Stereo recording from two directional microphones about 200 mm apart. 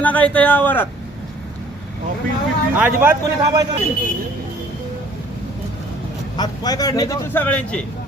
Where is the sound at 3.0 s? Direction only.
15° right (ahead or behind).